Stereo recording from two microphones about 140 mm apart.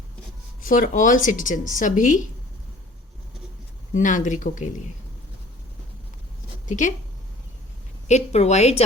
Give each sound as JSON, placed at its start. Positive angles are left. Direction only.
{"t": 0.6, "sound": "speech", "side_deg": 70}
{"t": 3.9, "sound": "speech", "side_deg": 65}
{"t": 6.7, "sound": "speech", "side_deg": 60}
{"t": 8.0, "sound": "a woman's voice", "side_deg": 50}